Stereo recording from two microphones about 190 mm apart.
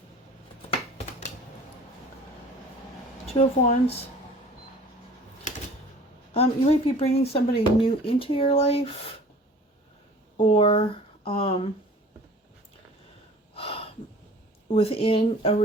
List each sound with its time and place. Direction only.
3.3 s speech: 30° left (ahead or behind)
6.3 s speech: 30° left (ahead or behind)
10.3 s speech: 30° left (ahead or behind)
13.5 s a sound: 30° left (ahead or behind)
14.7 s speech: 30° left (ahead or behind)